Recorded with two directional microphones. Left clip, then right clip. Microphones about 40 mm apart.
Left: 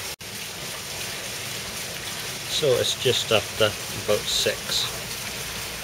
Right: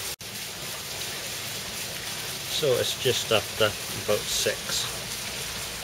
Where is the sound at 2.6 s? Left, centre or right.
Centre.